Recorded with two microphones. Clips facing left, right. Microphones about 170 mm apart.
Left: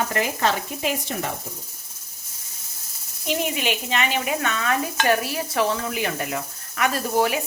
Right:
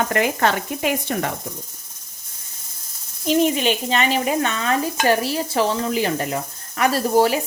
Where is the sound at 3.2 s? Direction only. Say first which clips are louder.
Right 7 dB; 30° right (ahead or behind).